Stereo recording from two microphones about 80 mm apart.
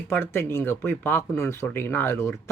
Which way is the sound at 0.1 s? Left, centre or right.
Left.